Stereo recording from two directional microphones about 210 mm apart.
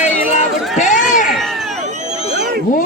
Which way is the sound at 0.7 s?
35° left (ahead or behind).